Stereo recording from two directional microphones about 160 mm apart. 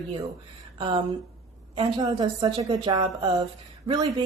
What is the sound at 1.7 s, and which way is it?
Speech, 25° right (ahead or behind).